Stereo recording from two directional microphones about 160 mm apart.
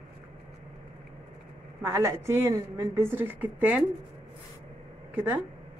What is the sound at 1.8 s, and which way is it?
A woman's voice, 15° right (ahead or behind).